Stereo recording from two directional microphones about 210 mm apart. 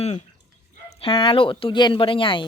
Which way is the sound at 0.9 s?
25° left (ahead or behind).